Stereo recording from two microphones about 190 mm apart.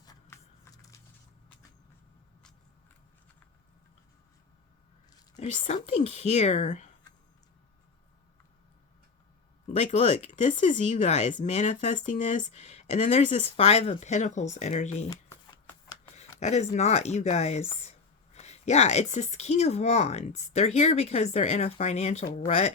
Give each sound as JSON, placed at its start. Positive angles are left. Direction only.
{"t": 0.0, "sound": "music", "side_deg": 15}
{"t": 5.5, "sound": "speech", "side_deg": 35}
{"t": 9.6, "sound": "speech", "side_deg": 35}
{"t": 16.1, "sound": "speech", "side_deg": 35}